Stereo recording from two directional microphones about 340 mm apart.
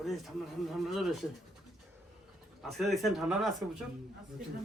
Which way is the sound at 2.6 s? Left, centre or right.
Centre.